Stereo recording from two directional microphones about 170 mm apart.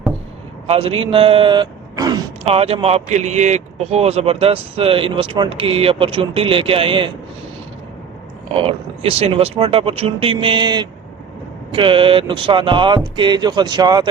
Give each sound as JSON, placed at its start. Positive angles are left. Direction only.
{"t": 0.7, "sound": "a man's voice", "side_deg": -35}
{"t": 2.4, "sound": "a man's voice", "side_deg": -35}
{"t": 8.5, "sound": "a man's voice", "side_deg": -35}